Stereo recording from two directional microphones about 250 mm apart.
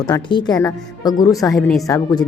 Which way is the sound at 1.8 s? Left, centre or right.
Centre.